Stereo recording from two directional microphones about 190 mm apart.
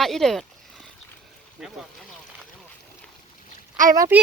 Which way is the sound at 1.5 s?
Centre (ahead or behind).